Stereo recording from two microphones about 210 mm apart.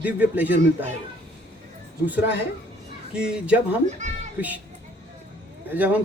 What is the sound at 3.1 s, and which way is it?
Speech, 5° right (ahead or behind).